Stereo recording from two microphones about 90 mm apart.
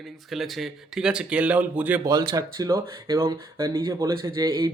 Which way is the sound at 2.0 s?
40° right (ahead or behind).